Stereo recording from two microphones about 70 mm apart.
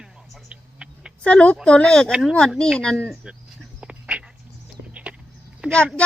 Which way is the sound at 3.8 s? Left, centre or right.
Centre.